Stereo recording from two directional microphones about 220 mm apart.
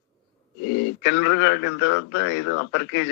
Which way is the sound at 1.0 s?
50° left (ahead or behind).